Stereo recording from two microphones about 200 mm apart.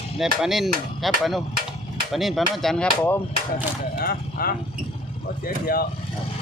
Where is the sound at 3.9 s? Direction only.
50° left (ahead or behind).